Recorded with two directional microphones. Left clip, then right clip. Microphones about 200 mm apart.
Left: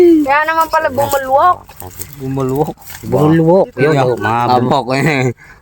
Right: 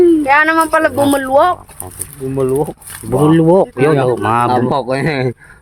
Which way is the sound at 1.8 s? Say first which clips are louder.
Even; 15° left (ahead or behind).